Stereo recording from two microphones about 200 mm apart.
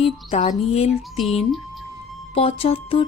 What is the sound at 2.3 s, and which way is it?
Speech, 30° left (ahead or behind).